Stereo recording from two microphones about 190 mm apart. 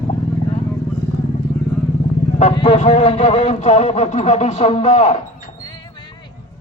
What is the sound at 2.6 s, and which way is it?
A man's voice, 40° left (ahead or behind).